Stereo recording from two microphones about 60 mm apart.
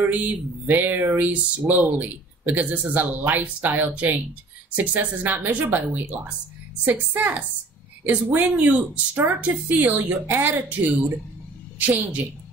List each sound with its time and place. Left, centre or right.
0.0 s a woman's voice: right